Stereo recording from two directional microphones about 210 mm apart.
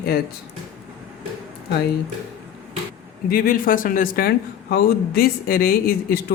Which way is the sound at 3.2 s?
45° left (ahead or behind).